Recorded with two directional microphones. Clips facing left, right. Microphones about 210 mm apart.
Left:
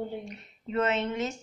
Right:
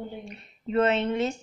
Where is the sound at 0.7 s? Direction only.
30° right (ahead or behind).